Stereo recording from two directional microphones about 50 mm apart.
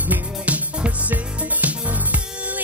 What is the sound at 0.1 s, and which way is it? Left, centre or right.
Music, right.